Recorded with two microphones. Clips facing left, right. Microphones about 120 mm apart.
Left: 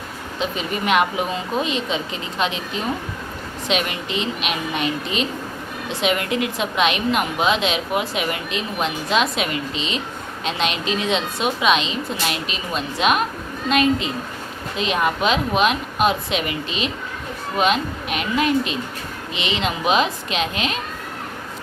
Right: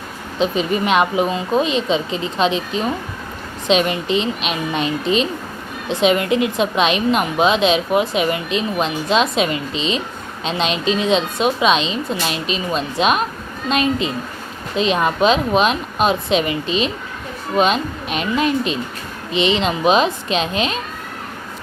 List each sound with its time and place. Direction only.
0.3 s a woman's voice: 25° right (ahead or behind)
3.7 s a woman's voice: 25° right (ahead or behind)